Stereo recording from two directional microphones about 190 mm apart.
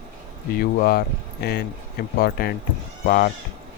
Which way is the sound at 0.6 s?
50° left (ahead or behind).